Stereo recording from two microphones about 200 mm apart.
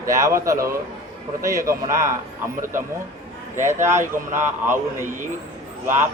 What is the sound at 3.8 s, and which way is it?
Speech, 15° right (ahead or behind).